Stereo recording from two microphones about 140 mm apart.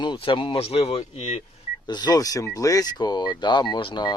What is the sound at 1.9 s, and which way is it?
Speech, 30° left (ahead or behind).